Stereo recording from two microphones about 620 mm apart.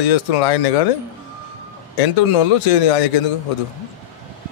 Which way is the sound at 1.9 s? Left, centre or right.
Left.